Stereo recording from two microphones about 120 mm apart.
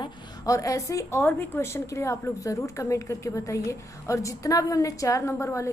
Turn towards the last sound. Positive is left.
turn(degrees=25)  # may be behind; listen again after turning